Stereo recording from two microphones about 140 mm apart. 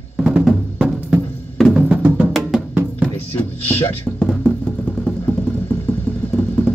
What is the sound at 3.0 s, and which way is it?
Music, 15° left (ahead or behind).